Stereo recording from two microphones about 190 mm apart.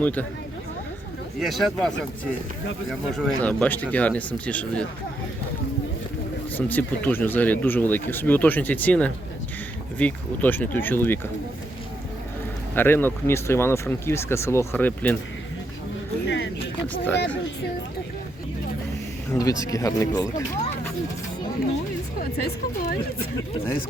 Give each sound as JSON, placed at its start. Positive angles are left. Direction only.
{"t": 0.0, "sound": "speech", "side_deg": 10}
{"t": 1.4, "sound": "speech", "side_deg": 0}
{"t": 2.9, "sound": "speech", "side_deg": 0}
{"t": 6.6, "sound": "speech", "side_deg": 10}
{"t": 12.7, "sound": "speech", "side_deg": 10}
{"t": 16.2, "sound": "a sound", "side_deg": 70}
{"t": 19.3, "sound": "speech", "side_deg": 15}
{"t": 22.2, "sound": "speech", "side_deg": 50}